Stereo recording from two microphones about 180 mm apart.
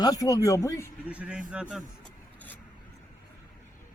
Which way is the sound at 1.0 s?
5° right (ahead or behind).